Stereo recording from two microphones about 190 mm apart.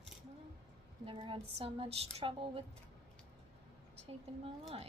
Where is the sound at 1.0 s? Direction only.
25° right (ahead or behind).